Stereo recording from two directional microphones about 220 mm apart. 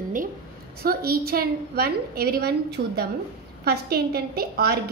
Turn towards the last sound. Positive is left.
turn(degrees=-45)  # may be behind; listen again after turning